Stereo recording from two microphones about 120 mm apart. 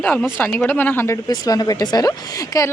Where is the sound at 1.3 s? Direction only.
30° left (ahead or behind).